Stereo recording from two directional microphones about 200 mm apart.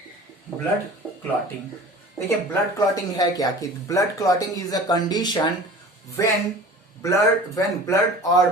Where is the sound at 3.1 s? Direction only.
15° left (ahead or behind).